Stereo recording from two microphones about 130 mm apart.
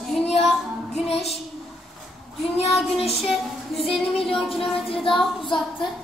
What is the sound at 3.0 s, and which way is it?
Child singing, centre (ahead or behind).